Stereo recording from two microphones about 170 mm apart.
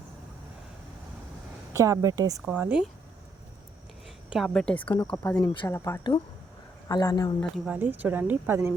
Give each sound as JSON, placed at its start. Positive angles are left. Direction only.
{"t": 1.7, "sound": "a woman's voice", "side_deg": -20}
{"t": 2.4, "sound": "speech", "side_deg": -10}
{"t": 4.3, "sound": "a woman's voice", "side_deg": 0}
{"t": 5.1, "sound": "speech", "side_deg": 15}
{"t": 7.5, "sound": "speech", "side_deg": -5}